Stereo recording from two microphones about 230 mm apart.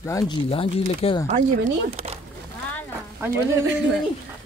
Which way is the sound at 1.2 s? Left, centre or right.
Right.